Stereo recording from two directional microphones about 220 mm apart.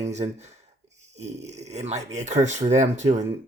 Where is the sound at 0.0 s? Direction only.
30° right (ahead or behind).